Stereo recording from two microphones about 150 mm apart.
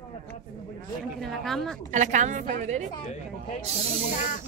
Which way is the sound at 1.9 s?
55° right (ahead or behind).